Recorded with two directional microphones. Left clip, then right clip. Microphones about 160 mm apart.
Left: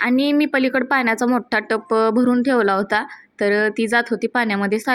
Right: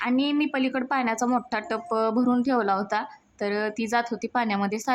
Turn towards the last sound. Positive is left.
turn(degrees=20)  # may be behind; listen again after turning